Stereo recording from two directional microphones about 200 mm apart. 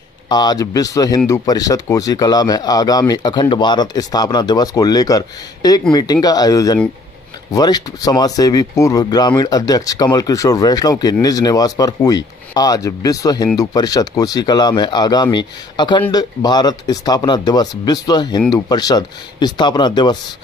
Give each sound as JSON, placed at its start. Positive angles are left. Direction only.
{"t": 0.3, "sound": "speech", "side_deg": 20}